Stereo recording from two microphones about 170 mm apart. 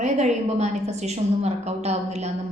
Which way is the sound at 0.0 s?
40° right (ahead or behind).